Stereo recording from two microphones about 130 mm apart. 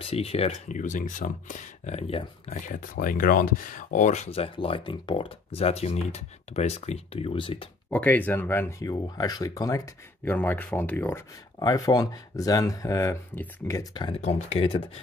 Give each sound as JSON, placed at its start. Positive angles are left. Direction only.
{"t": 0.0, "sound": "speech", "side_deg": 50}
{"t": 0.7, "sound": "speech", "side_deg": 75}
{"t": 2.0, "sound": "speech", "side_deg": 50}
{"t": 2.5, "sound": "speech", "side_deg": 90}
{"t": 7.9, "sound": "speech", "side_deg": 10}
{"t": 10.2, "sound": "speech", "side_deg": 15}
{"t": 11.6, "sound": "speech", "side_deg": 30}
{"t": 14.2, "sound": "speech", "side_deg": 50}